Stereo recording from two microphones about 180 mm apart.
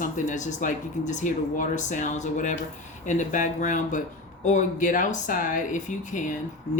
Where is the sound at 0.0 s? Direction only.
45° left (ahead or behind).